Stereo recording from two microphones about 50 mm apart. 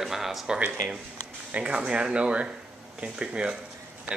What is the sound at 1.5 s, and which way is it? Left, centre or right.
Speech, right.